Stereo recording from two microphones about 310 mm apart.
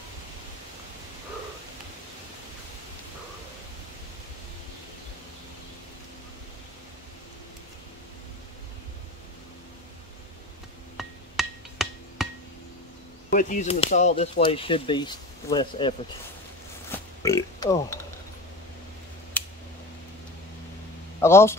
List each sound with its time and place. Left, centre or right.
11.0 s music: centre
13.3 s speech: left
17.2 s speech: centre
19.4 s a sound: centre
21.2 s speech: centre